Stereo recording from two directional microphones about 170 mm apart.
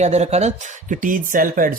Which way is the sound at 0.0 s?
40° right (ahead or behind).